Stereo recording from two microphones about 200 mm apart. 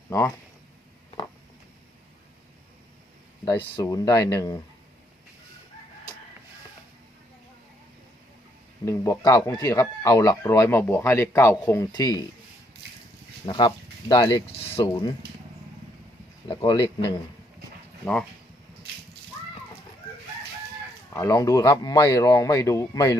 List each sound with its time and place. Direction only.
0.1 s a man's voice: 15° left (ahead or behind)
3.4 s a man's voice: 25° left (ahead or behind)
8.8 s a man's voice: 15° left (ahead or behind)
13.4 s speech: 25° left (ahead or behind)
16.5 s speech: 20° left (ahead or behind)
18.0 s speech: 5° left (ahead or behind)
21.2 s a man's voice: 15° left (ahead or behind)